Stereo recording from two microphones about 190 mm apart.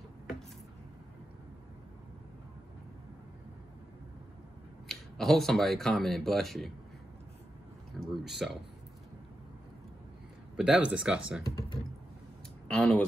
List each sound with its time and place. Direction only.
4.8 s speech: centre (ahead or behind)
8.0 s a sound: centre (ahead or behind)
10.5 s speech: 5° right (ahead or behind)
11.4 s speech: 20° left (ahead or behind)
12.6 s speech: 5° left (ahead or behind)